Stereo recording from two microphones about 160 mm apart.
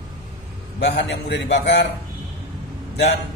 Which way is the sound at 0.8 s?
90° left.